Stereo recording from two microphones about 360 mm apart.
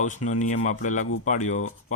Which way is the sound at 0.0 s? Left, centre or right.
Centre.